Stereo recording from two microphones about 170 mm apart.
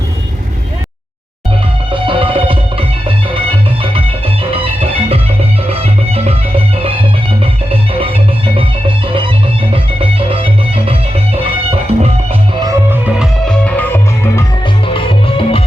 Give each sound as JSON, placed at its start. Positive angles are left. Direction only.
{"t": 1.9, "sound": "music", "side_deg": -30}
{"t": 4.5, "sound": "music", "side_deg": -35}
{"t": 7.7, "sound": "organ", "side_deg": -35}
{"t": 9.7, "sound": "music", "side_deg": -30}
{"t": 12.6, "sound": "music", "side_deg": -10}
{"t": 13.5, "sound": "music", "side_deg": 10}
{"t": 14.8, "sound": "music", "side_deg": 30}